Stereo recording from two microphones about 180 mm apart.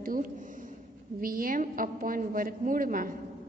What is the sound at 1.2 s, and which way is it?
A woman's voice, 55° right (ahead or behind).